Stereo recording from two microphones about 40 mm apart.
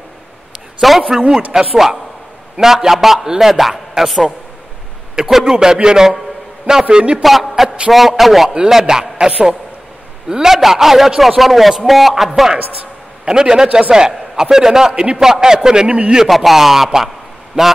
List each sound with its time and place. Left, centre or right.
0.7 s a man's voice: centre; by 7.2 s right
7.2 s a man's voice: centre
8.5 s a man's voice: centre
13.2 s a man's voice: centre
15.9 s a man's voice: right
16.3 s a man's voice: centre
17.6 s a man's voice: right